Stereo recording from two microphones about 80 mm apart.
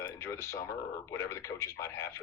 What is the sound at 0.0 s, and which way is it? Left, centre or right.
Speech, left.